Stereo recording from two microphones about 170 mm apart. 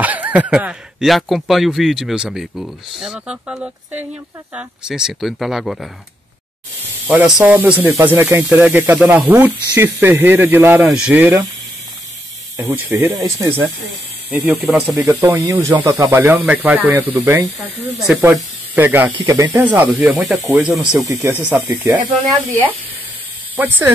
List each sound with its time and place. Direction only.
0.0 s speech: 10° right (ahead or behind)
7.2 s speech: 5° right (ahead or behind)
12.5 s speech: 10° right (ahead or behind)
14.9 s speech: 15° right (ahead or behind)
21.1 s speech: 15° right (ahead or behind)
23.5 s speech: 10° right (ahead or behind)